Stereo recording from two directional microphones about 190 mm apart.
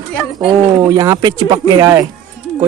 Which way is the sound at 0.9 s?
15° right (ahead or behind).